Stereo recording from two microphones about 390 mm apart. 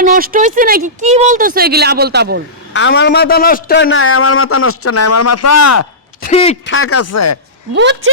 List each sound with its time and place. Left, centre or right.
0.0 s speech: centre
2.7 s a man's voice: left
6.2 s speech: centre
6.7 s a man's voice: left
7.8 s speech: right